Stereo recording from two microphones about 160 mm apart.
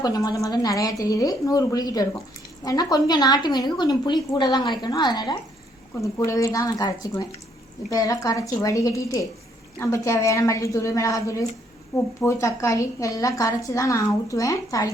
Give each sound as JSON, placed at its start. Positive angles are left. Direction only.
{"t": 0.0, "sound": "a woman's voice", "side_deg": 25}